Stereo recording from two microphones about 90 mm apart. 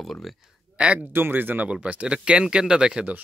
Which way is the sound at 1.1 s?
25° right (ahead or behind).